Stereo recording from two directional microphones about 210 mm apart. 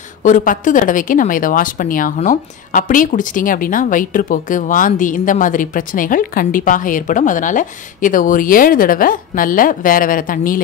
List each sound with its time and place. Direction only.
0.2 s speech: 35° left (ahead or behind)